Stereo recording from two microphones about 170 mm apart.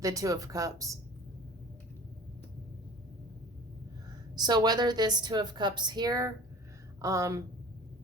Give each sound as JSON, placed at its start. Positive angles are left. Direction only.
{"t": 0.0, "sound": "a woman's voice", "side_deg": -20}
{"t": 4.4, "sound": "a woman's voice", "side_deg": -25}